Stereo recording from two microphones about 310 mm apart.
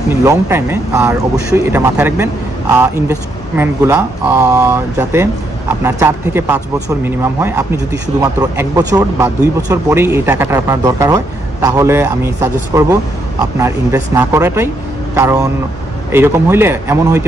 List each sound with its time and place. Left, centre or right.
0.2 s speech: centre